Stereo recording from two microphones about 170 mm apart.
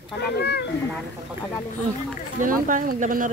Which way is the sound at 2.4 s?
50° right (ahead or behind).